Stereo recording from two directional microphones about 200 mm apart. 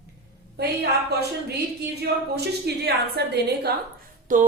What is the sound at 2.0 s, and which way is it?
A woman's voice, 55° right (ahead or behind).